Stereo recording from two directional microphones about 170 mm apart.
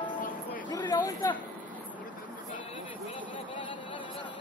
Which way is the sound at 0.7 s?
25° left (ahead or behind).